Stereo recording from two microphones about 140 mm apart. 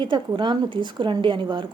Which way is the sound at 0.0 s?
35° right (ahead or behind).